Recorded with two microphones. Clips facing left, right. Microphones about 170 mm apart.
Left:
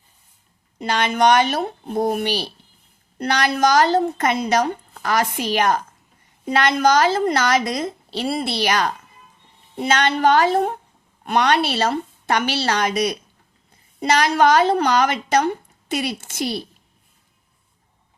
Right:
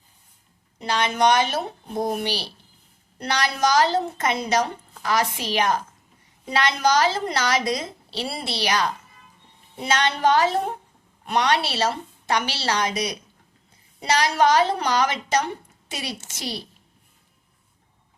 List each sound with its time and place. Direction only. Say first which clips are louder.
0.9 s a woman's voice: left 3 dB; 60° left (ahead or behind)